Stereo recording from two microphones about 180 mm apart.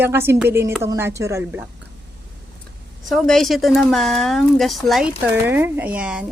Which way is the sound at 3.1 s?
Centre (ahead or behind).